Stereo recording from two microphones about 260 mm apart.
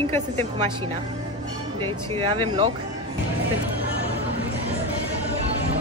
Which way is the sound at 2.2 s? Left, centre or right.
Right.